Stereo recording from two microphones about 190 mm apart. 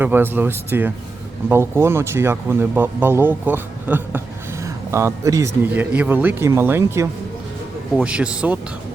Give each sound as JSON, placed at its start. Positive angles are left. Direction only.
{"t": 0.0, "sound": "speech", "side_deg": -10}